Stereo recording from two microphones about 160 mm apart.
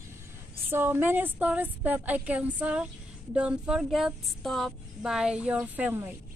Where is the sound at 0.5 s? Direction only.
15° right (ahead or behind).